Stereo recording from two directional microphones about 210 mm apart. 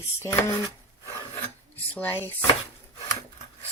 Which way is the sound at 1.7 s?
10° left (ahead or behind).